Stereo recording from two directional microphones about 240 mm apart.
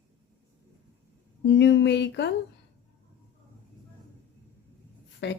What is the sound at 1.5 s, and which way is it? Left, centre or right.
Speech, left.